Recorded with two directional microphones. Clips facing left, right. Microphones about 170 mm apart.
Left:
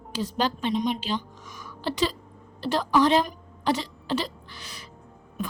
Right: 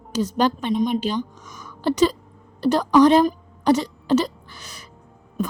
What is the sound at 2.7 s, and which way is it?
Speech, 45° right (ahead or behind).